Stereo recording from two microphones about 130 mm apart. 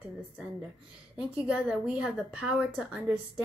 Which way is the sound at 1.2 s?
5° right (ahead or behind).